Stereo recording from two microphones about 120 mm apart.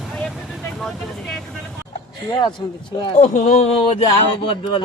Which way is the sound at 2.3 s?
40° left (ahead or behind).